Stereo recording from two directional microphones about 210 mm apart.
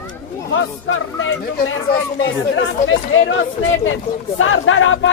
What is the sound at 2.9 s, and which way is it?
A man's voice, 70° left (ahead or behind).